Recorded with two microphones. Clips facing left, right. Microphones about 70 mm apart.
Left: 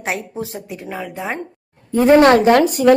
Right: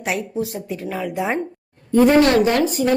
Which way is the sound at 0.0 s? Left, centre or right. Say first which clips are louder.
Right 1 dB; left.